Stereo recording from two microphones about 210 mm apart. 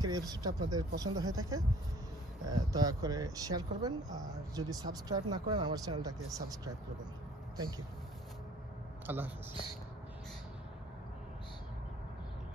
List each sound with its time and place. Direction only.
0.0 s speech: 20° right (ahead or behind)
9.0 s speech: 10° right (ahead or behind)